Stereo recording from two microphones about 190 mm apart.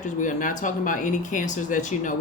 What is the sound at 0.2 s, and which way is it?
Speech, 40° left (ahead or behind).